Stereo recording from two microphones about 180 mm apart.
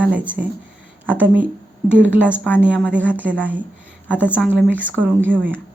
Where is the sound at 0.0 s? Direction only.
10° right (ahead or behind).